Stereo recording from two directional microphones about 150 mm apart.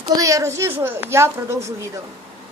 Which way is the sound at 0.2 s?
20° right (ahead or behind).